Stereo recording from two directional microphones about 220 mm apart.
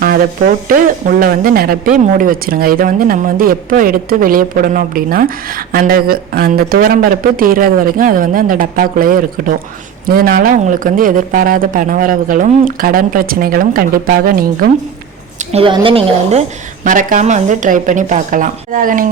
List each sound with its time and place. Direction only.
0.7 s speech: 40° right (ahead or behind)
15.4 s a woman's voice: 25° right (ahead or behind)
16.8 s speech: 35° right (ahead or behind)